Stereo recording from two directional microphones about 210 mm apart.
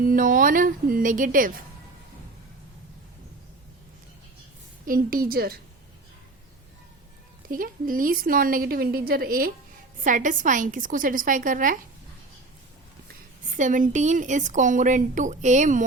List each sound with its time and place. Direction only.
0.0 s a woman's voice: 40° right (ahead or behind)
4.9 s a woman's voice: 45° right (ahead or behind)
7.4 s a woman's voice: 40° right (ahead or behind)
13.4 s a woman's voice: 40° right (ahead or behind)